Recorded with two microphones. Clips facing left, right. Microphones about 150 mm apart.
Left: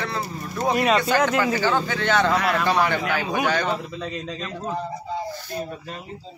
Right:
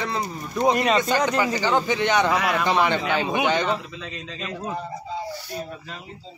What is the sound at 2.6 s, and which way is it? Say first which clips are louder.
Speech: even; 20° right (ahead or behind).